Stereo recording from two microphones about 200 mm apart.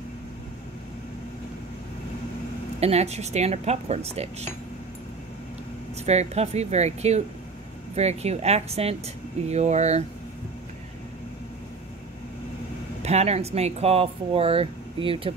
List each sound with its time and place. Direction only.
2.8 s speech: 30° right (ahead or behind)
6.0 s speech: 35° right (ahead or behind)
13.0 s speech: 30° right (ahead or behind)